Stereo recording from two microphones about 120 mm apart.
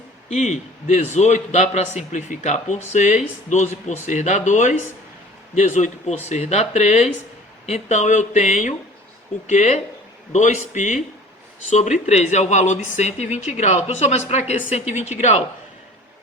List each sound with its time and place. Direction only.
0.3 s a man's voice: 70° left (ahead or behind); by 8.7 s 90° left
9.5 s a man's voice: 75° left (ahead or behind)
11.7 s a man's voice: 75° left (ahead or behind)